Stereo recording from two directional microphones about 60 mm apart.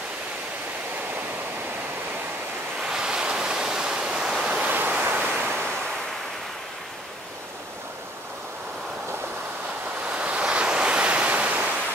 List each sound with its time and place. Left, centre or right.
2.9 s waves: centre
4.6 s waves: right
10.0 s waves: centre